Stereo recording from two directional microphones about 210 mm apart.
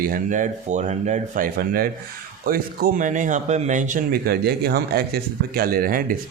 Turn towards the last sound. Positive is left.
turn(degrees=-45)  # may be behind; listen again after turning